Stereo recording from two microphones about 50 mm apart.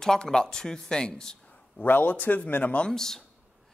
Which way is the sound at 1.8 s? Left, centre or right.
Left.